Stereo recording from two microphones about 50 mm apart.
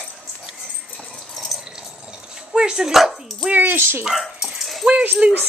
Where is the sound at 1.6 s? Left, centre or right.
Centre.